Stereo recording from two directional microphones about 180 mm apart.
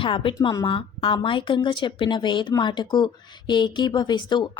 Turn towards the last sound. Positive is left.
turn(degrees=25)  # may be behind; listen again after turning